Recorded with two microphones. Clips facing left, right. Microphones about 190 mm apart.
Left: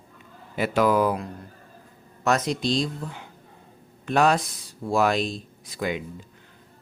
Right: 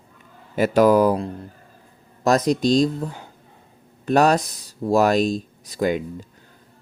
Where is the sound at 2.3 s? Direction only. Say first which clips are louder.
Right 6 dB; 40° right (ahead or behind).